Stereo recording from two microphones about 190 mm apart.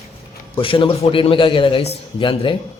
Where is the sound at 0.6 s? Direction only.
30° left (ahead or behind).